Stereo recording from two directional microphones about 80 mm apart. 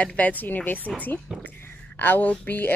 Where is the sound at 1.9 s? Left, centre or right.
Left.